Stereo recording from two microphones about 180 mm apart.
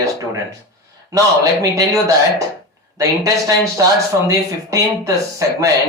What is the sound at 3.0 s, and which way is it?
Speech, 20° right (ahead or behind).